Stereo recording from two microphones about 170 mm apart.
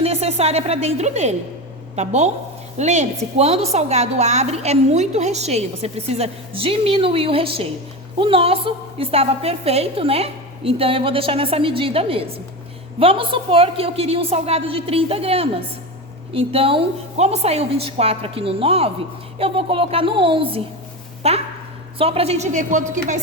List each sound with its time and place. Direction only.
0.0 s a woman's voice: 35° right (ahead or behind)